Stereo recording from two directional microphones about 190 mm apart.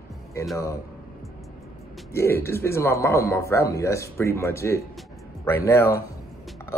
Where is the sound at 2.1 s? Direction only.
15° left (ahead or behind).